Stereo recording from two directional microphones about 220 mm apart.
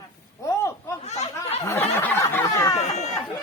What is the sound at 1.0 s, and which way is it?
Speech, 30° left (ahead or behind).